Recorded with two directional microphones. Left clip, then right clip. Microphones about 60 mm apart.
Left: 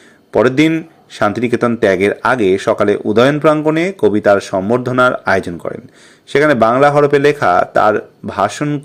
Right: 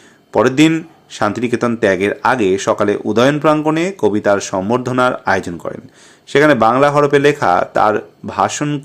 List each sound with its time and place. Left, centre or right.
0.3 s a man's voice: left
5.1 s a man's voice: left